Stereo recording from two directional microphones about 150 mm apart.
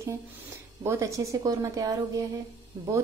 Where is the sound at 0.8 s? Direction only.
20° right (ahead or behind).